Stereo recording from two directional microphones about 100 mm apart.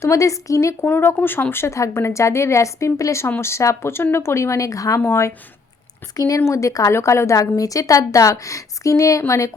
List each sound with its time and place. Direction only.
0.0 s speech: 30° left (ahead or behind)
0.9 s a woman's voice: 20° left (ahead or behind)